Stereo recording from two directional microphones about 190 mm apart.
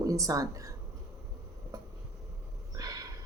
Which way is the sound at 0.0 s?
15° right (ahead or behind).